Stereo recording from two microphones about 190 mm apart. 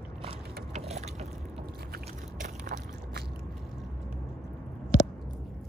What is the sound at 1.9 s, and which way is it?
Biting, 45° right (ahead or behind).